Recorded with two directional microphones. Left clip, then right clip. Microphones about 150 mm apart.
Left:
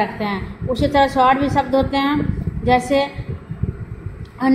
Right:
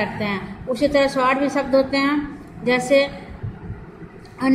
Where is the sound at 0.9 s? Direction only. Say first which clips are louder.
Left 5 dB; 20° left (ahead or behind).